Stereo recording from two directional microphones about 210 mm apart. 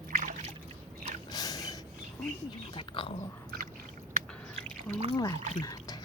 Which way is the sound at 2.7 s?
25° left (ahead or behind).